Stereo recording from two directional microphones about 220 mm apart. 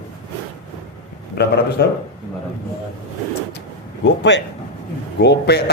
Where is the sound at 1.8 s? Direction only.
45° left (ahead or behind).